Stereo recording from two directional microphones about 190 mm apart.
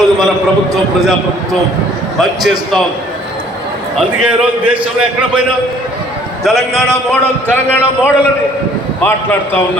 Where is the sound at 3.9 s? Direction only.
5° right (ahead or behind).